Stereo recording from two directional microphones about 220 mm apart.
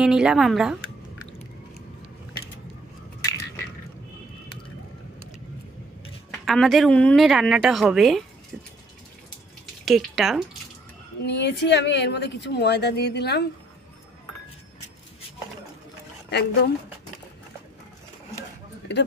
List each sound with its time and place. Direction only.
0.0 s a woman's voice: 5° right (ahead or behind)
6.4 s a woman's voice: centre (ahead or behind)
9.8 s a woman's voice: centre (ahead or behind)
11.2 s speech: 50° left (ahead or behind)
16.3 s speech: 50° left (ahead or behind)